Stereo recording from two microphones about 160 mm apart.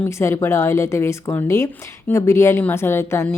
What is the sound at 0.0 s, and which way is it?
Speech, 15° left (ahead or behind).